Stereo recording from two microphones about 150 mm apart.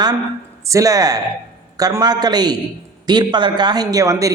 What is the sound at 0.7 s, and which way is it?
A man's voice, 20° right (ahead or behind).